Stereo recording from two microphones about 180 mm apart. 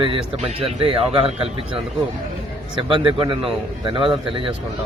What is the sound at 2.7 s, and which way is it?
A man's voice, 25° right (ahead or behind).